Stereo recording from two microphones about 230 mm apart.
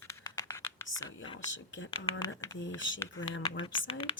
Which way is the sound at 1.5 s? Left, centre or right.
Left.